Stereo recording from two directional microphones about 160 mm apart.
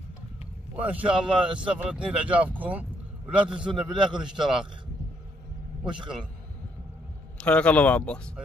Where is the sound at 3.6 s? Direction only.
30° right (ahead or behind).